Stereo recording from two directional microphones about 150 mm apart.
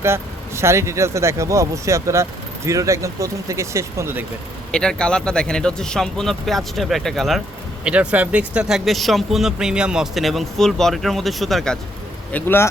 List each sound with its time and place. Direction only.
0.0 s speech: 15° right (ahead or behind)
4.7 s speech: 5° left (ahead or behind)
12.3 s speech: 15° left (ahead or behind)